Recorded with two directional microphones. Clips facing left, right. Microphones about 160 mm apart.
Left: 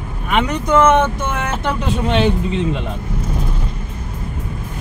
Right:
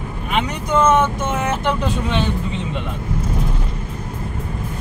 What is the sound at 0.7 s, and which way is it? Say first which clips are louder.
Speech: left 3 dB; 75° left (ahead or behind).